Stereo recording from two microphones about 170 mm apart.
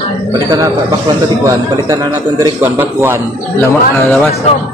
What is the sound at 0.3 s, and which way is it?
A man's voice, 20° right (ahead or behind).